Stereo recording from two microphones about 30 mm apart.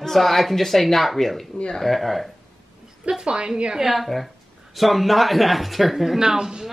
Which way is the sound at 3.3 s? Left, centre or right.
Right.